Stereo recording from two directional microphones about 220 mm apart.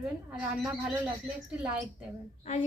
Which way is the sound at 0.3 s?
Centre (ahead or behind).